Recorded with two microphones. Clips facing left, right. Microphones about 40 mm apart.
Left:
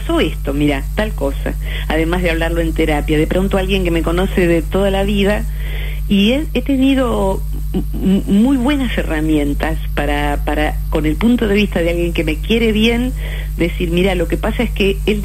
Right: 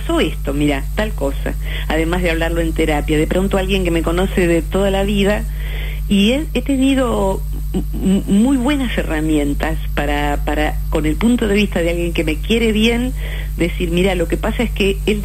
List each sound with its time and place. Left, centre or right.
0.0 s speech: centre
8.3 s speech: left
8.6 s speech: centre